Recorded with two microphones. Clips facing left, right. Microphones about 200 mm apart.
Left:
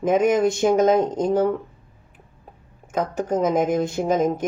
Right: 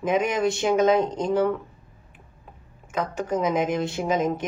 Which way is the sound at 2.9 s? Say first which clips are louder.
Left 3 dB; 45° left (ahead or behind).